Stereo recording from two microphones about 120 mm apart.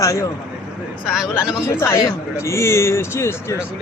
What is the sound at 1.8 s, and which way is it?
Speech, 25° left (ahead or behind).